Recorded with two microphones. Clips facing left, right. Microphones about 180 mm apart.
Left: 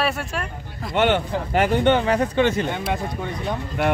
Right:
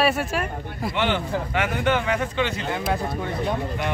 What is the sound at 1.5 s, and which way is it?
Speech, 30° left (ahead or behind).